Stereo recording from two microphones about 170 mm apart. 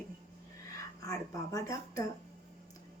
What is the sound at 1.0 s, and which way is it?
Speech, 20° left (ahead or behind).